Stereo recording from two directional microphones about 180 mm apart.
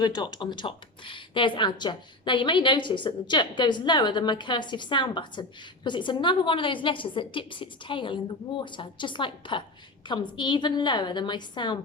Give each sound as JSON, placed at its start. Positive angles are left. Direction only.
{"t": 0.0, "sound": "speech", "side_deg": 20}